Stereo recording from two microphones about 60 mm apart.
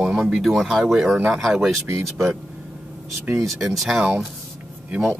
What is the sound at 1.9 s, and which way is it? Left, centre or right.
Speech, right.